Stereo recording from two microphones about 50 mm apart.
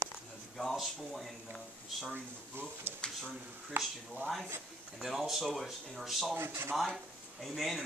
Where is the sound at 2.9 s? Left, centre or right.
Right.